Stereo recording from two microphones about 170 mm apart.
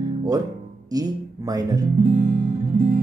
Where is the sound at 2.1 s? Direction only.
50° right (ahead or behind).